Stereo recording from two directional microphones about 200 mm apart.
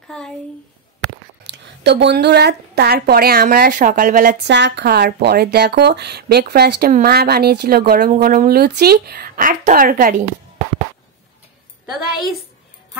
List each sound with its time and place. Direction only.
1.4 s a woman's voice: 60° right (ahead or behind); by 4.4 s 40° right (ahead or behind)
4.5 s speech: 60° right (ahead or behind); by 10.2 s 45° right (ahead or behind)